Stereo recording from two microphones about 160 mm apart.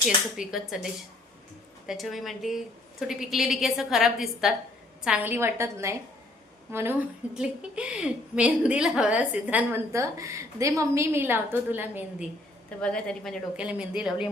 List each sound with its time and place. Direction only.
0.3 s a woman's voice: centre (ahead or behind)
1.9 s a woman's voice: centre (ahead or behind)
12.8 s a woman's voice: 5° left (ahead or behind)
13.6 s a woman's voice: 5° right (ahead or behind)